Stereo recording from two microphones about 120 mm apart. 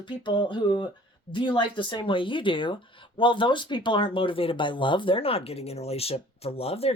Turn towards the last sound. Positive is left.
turn(degrees=55)  # may be behind; listen again after turning